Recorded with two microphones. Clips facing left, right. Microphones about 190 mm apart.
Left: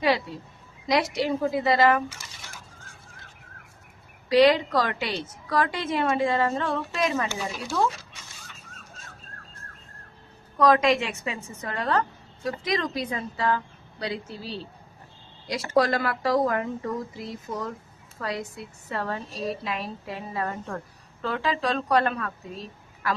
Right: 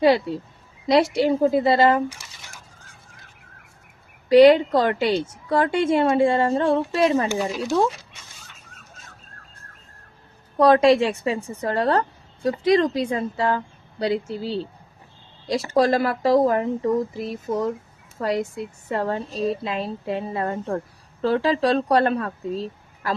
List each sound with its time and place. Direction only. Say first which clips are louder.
0.0 s a woman's voice: right 7 dB; 35° right (ahead or behind)
4.3 s a woman's voice: right 6 dB; 30° right (ahead or behind)
10.6 s a woman's voice: right 5 dB; 30° right (ahead or behind)